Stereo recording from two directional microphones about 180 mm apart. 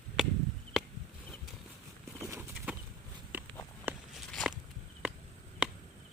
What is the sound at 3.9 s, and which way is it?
Walk, 10° right (ahead or behind).